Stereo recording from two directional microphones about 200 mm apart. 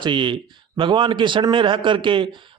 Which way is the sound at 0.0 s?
25° right (ahead or behind).